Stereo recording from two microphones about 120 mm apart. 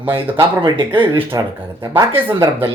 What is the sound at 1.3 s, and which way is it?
Speech, 25° right (ahead or behind).